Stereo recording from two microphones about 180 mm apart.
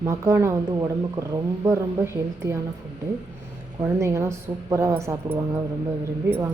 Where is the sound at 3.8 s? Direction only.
15° right (ahead or behind).